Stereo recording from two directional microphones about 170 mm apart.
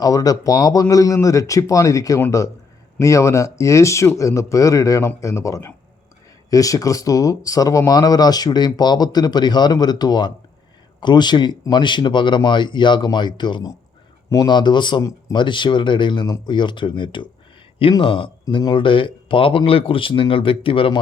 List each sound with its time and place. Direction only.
0.0 s speech: 20° left (ahead or behind)